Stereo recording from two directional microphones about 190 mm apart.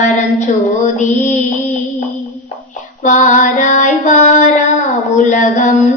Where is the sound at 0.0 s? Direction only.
40° left (ahead or behind).